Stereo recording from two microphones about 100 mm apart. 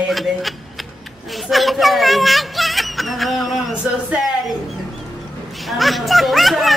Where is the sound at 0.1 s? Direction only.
Centre (ahead or behind).